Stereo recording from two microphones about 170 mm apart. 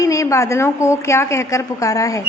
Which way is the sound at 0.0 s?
20° left (ahead or behind).